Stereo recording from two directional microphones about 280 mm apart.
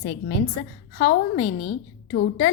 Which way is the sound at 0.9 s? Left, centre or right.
Left.